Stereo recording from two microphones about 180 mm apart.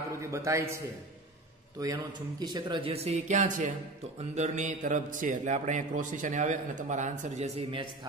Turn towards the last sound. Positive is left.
turn(degrees=-30)  # may be behind; listen again after turning